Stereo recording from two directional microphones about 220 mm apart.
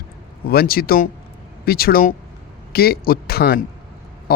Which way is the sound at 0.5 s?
45° left (ahead or behind).